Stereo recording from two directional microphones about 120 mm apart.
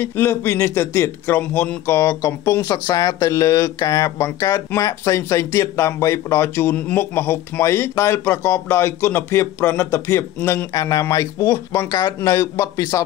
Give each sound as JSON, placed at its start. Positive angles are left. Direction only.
{"t": 0.0, "sound": "a man's voice", "side_deg": 20}